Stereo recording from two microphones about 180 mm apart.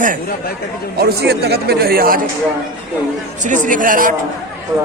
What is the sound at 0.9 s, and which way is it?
Speech, 65° right (ahead or behind).